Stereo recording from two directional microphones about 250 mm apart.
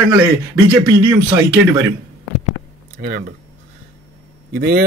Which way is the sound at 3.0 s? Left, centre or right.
Right.